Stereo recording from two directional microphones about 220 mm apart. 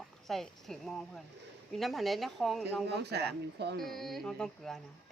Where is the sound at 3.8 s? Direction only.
Centre (ahead or behind).